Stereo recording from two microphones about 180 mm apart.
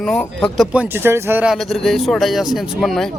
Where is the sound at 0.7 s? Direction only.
10° right (ahead or behind).